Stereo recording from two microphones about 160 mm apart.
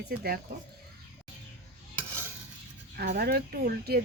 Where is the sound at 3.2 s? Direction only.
80° right.